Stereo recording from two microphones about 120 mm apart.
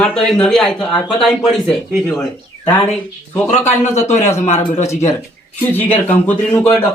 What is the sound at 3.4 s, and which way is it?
Speech, 70° left (ahead or behind).